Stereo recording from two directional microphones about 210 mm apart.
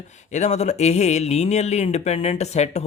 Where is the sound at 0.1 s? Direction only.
35° left (ahead or behind).